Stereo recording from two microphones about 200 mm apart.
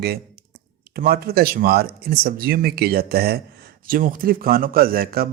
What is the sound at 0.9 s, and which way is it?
Speech, 50° right (ahead or behind).